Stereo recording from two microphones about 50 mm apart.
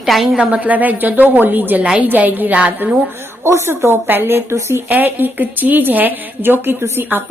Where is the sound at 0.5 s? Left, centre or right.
Right.